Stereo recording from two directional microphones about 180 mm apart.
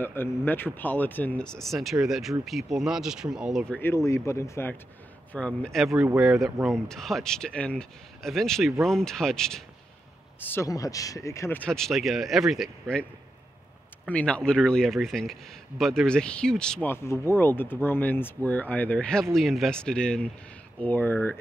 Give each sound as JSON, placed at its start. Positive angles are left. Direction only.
{"t": 0.0, "sound": "speech", "side_deg": 10}
{"t": 3.8, "sound": "speech", "side_deg": 15}
{"t": 5.9, "sound": "speech", "side_deg": -10}
{"t": 6.4, "sound": "speech", "side_deg": 0}
{"t": 10.4, "sound": "speech", "side_deg": 15}
{"t": 11.7, "sound": "speech", "side_deg": 0}
{"t": 14.0, "sound": "speech", "side_deg": 5}